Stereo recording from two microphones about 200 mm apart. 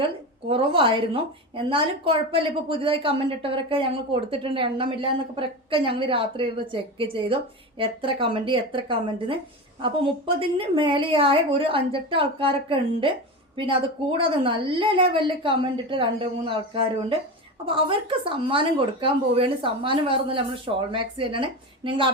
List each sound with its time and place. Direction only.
0.0 s a woman's voice: 25° right (ahead or behind)